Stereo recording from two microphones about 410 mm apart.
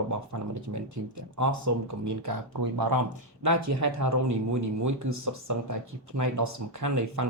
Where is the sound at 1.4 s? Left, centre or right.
Right.